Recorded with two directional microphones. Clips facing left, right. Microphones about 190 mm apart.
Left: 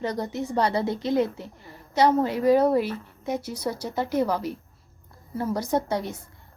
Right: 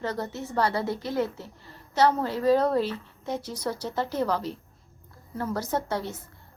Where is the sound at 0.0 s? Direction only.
15° left (ahead or behind).